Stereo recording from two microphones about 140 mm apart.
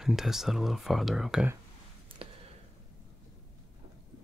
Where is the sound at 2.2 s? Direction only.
40° right (ahead or behind).